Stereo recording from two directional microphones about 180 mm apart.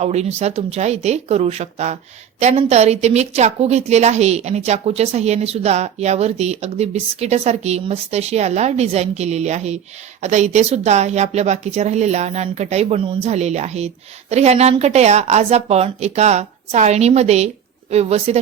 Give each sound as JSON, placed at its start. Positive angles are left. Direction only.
{"t": 0.0, "sound": "a woman's voice", "side_deg": -35}